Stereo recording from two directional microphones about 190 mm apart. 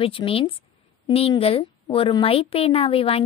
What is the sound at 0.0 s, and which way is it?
A woman's voice, 30° left (ahead or behind).